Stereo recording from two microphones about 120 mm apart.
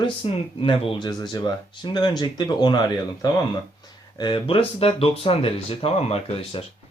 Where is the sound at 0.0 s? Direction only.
50° left (ahead or behind).